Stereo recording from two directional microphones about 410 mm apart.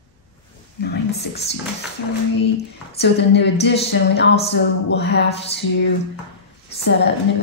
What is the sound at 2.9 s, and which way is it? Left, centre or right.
Speech, left.